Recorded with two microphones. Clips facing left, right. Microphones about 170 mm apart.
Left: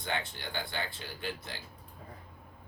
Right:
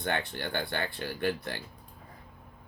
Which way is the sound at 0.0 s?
60° right (ahead or behind).